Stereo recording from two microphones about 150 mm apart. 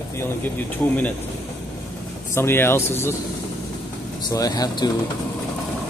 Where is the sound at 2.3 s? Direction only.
15° left (ahead or behind).